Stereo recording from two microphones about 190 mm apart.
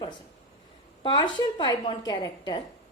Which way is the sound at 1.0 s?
25° left (ahead or behind).